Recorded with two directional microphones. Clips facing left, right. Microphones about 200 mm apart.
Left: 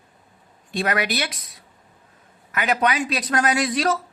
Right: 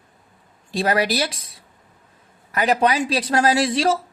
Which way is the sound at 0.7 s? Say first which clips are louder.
Right 3 dB; 30° right (ahead or behind).